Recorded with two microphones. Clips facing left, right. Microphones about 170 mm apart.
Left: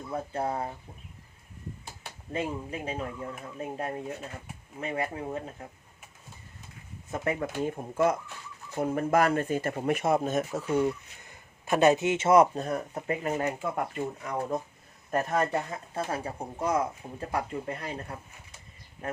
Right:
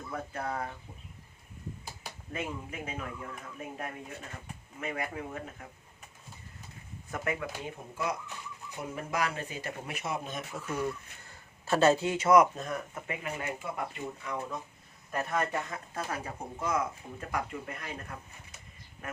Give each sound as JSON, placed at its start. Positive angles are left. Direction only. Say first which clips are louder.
{"t": 0.1, "sound": "speech", "louder": "left 5 dB", "side_deg": 25}
{"t": 2.3, "sound": "speech", "louder": "left 5 dB", "side_deg": 30}
{"t": 7.1, "sound": "speech", "louder": "left 4 dB", "side_deg": 35}
{"t": 7.6, "sound": "speech", "louder": "left 10 dB", "side_deg": 50}
{"t": 10.7, "sound": "speech", "louder": "left 5 dB", "side_deg": 25}